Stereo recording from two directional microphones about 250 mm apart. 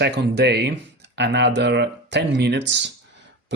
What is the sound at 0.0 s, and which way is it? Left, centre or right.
Speech, right.